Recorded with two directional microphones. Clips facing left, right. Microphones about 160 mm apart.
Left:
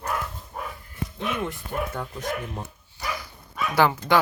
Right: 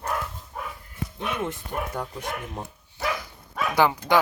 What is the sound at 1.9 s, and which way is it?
Speech, 15° right (ahead or behind).